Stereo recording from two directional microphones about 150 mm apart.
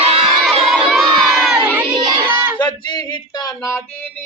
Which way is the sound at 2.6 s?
30° left (ahead or behind).